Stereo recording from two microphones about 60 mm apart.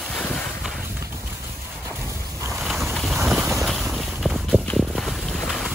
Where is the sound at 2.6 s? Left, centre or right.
Centre.